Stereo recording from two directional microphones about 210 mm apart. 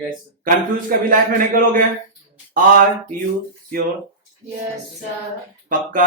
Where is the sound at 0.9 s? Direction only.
40° right (ahead or behind).